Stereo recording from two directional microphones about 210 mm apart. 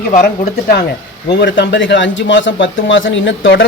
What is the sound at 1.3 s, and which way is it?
A man's voice, 55° left (ahead or behind).